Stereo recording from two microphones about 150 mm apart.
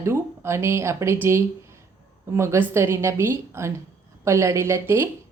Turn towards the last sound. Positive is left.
turn(degrees=-15)  # may be behind; listen again after turning